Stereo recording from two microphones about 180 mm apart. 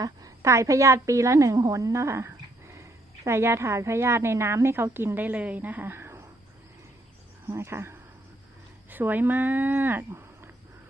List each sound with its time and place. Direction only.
0.0 s a woman's voice: 20° right (ahead or behind)
7.4 s speech: 15° right (ahead or behind)